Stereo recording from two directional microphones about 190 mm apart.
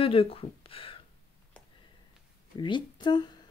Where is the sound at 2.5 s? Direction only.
25° left (ahead or behind).